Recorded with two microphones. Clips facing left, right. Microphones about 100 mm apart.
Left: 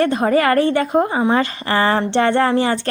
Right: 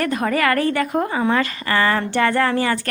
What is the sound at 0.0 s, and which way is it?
A woman's voice, 30° left (ahead or behind).